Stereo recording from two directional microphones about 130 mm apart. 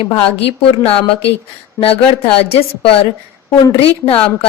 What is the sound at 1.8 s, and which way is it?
Speech, 25° left (ahead or behind).